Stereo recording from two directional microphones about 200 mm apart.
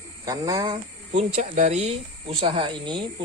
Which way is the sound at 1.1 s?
35° right (ahead or behind).